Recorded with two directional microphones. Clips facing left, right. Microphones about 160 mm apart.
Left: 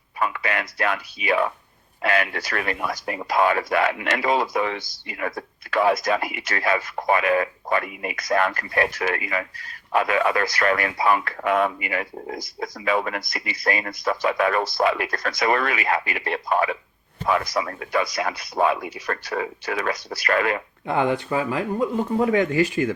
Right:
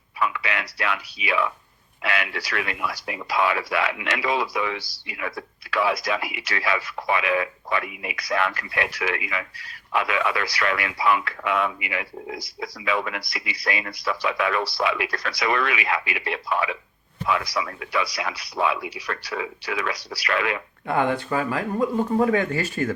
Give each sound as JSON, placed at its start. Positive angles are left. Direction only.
{"t": 0.2, "sound": "a man's voice", "side_deg": 45}
{"t": 20.8, "sound": "speech", "side_deg": 20}